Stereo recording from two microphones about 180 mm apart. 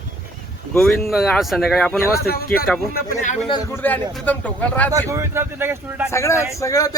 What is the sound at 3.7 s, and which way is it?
Speech, 10° left (ahead or behind).